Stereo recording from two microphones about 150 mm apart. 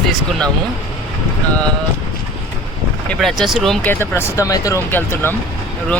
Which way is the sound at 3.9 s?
15° left (ahead or behind).